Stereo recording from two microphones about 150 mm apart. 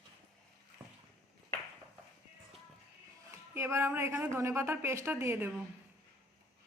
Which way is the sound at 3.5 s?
15° right (ahead or behind).